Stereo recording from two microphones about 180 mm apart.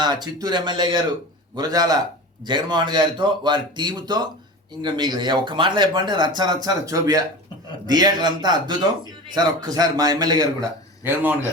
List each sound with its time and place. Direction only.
0.0 s speech: 25° right (ahead or behind)